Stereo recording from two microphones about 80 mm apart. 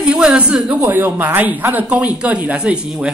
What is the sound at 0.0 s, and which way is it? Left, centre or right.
Speech, centre.